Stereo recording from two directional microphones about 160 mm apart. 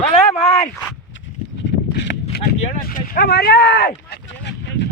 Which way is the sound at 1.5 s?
90° left.